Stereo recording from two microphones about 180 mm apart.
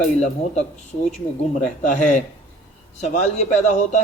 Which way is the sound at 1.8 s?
45° left (ahead or behind).